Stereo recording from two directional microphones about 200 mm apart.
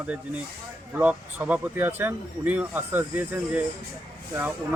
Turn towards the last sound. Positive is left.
turn(degrees=-10)  # may be behind; listen again after turning